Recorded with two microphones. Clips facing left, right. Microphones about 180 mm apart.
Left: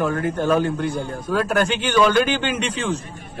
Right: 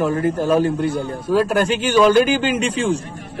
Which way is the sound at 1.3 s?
5° right (ahead or behind).